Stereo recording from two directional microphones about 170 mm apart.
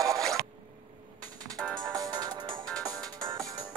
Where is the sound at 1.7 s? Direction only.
20° right (ahead or behind).